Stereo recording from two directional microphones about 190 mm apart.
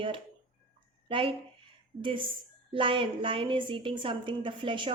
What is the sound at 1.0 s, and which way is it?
A woman's voice, 30° right (ahead or behind).